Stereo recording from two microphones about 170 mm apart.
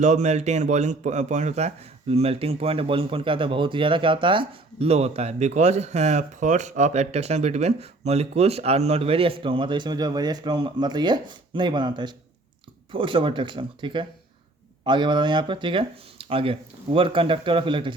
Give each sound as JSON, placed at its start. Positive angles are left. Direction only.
{"t": 0.0, "sound": "a man's voice", "side_deg": -45}